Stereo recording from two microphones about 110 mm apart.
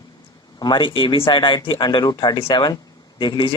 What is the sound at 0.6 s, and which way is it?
Speech, 45° left (ahead or behind).